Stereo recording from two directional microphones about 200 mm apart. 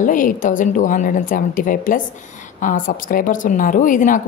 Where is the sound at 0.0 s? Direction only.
40° left (ahead or behind).